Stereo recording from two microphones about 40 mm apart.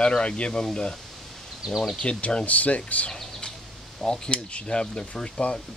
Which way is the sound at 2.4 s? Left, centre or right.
Left.